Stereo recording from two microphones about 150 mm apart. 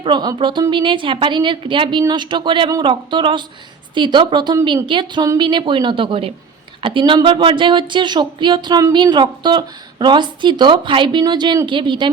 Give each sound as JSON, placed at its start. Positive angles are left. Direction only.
{"t": 0.0, "sound": "speech", "side_deg": -30}